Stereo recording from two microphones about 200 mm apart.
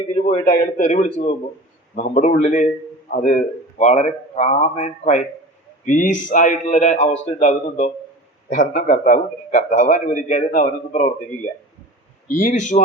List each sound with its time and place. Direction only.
0.4 s a man's voice: 40° left (ahead or behind)